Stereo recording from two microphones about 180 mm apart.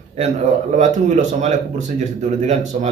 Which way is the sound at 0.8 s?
40° right (ahead or behind).